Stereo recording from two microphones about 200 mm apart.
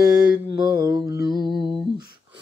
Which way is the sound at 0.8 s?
15° right (ahead or behind).